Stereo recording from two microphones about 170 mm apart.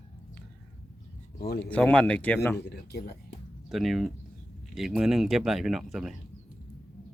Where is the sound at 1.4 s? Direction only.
65° left (ahead or behind).